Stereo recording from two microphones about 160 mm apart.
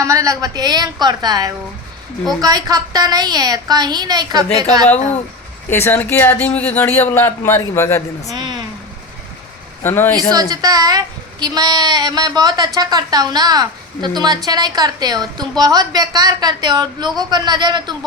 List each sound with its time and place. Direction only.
0.0 s a woman's voice: 20° right (ahead or behind)
5.7 s speech: 15° left (ahead or behind)
8.3 s a woman's voice: 25° right (ahead or behind)
9.8 s speech: 15° left (ahead or behind)
10.5 s a woman's voice: 25° right (ahead or behind)